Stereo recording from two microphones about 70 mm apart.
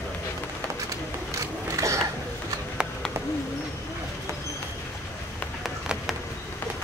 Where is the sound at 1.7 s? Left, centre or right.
Right.